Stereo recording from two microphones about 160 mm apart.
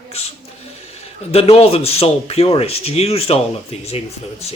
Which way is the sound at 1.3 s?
40° left (ahead or behind).